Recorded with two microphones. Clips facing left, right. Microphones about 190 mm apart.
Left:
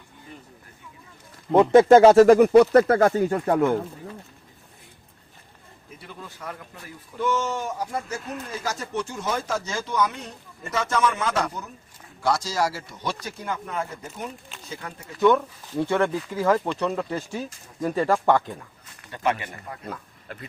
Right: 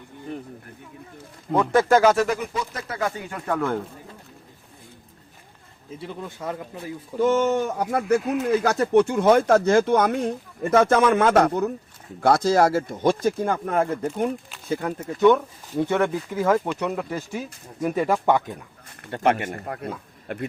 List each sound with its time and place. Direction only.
0.3 s speech: 60° right (ahead or behind)
1.5 s speech: 25° left (ahead or behind)
2.2 s speech: 50° left (ahead or behind)
2.5 s speech: 65° left (ahead or behind); by 3.6 s 35° left (ahead or behind)
6.0 s speech: 25° right (ahead or behind)
7.2 s speech: 50° right (ahead or behind)
15.2 s speech: 15° right (ahead or behind)
19.0 s speech: 55° right (ahead or behind)